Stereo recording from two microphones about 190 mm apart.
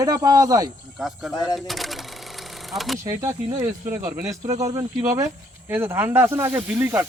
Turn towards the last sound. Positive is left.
turn(degrees=-10)  # may be behind; listen again after turning